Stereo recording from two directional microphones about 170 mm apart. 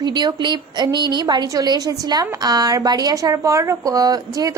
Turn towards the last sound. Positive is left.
turn(degrees=-20)  # may be behind; listen again after turning